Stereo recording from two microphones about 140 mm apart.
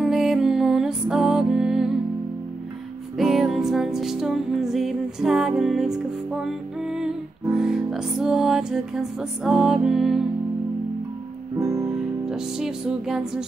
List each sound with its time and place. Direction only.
0.0 s music: 5° right (ahead or behind)
3.2 s music: centre (ahead or behind)
11.5 s music: 20° right (ahead or behind)
12.3 s music: 5° right (ahead or behind)